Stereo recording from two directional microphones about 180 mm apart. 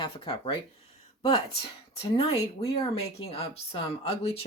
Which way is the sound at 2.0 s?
30° left (ahead or behind).